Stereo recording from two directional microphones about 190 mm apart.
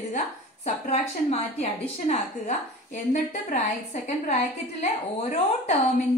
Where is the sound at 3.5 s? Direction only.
40° left (ahead or behind).